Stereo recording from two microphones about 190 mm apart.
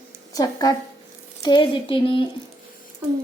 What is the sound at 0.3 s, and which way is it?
Speech, 20° left (ahead or behind).